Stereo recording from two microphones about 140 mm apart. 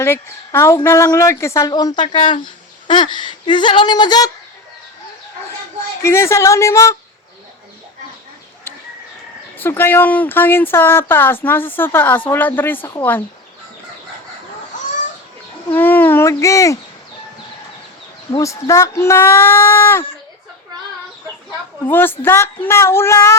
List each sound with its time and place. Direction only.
0.0 s a woman's voice: 20° left (ahead or behind)
6.0 s a woman's voice: 20° left (ahead or behind)
9.6 s speech: 15° left (ahead or behind)
15.7 s speech: 15° left (ahead or behind)
18.3 s speech: 20° left (ahead or behind)
21.8 s speech: 15° left (ahead or behind)